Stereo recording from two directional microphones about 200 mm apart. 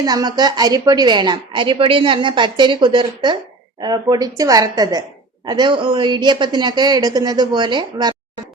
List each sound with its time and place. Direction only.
0.0 s a woman's voice: 20° right (ahead or behind)